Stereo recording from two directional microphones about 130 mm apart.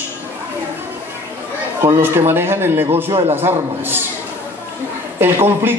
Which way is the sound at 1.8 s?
20° right (ahead or behind).